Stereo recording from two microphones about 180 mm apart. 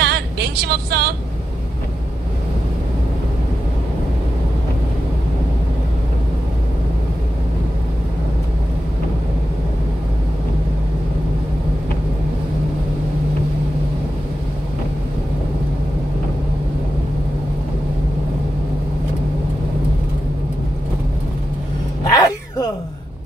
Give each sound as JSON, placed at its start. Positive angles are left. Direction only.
{"t": 0.0, "sound": "vehicle", "side_deg": -65}
{"t": 22.1, "sound": "cat", "side_deg": 20}